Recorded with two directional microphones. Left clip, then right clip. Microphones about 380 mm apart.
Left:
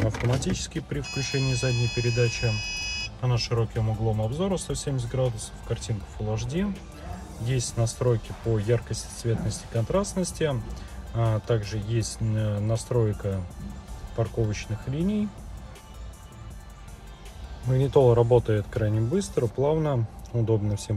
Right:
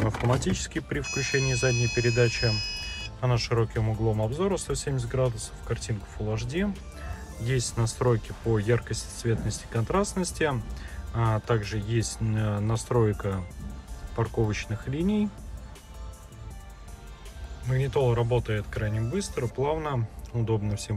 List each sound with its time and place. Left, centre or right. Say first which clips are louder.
0.0 s speech: right 1 dB; centre
2.5 s speech: even; left
3.2 s speech: right 5 dB; centre
17.6 s speech: left 6 dB; centre